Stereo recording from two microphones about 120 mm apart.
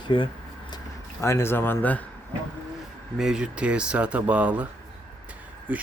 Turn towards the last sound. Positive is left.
turn(degrees=-15)  # may be behind; listen again after turning